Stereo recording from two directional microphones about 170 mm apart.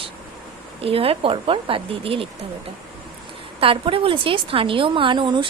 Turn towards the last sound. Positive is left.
turn(degrees=-30)  # may be behind; listen again after turning